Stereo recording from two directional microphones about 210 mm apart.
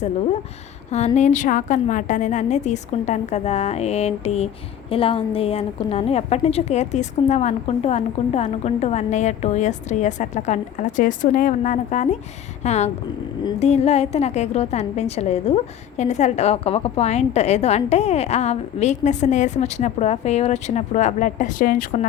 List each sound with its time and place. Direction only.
0.9 s a woman's voice: 35° left (ahead or behind)